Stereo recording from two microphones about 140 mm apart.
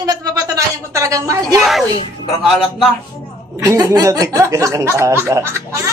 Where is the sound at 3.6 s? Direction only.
25° right (ahead or behind).